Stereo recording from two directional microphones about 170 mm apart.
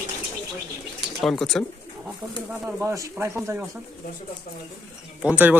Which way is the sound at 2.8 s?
15° right (ahead or behind).